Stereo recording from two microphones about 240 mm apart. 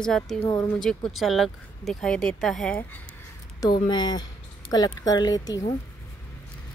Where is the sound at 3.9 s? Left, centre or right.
Centre.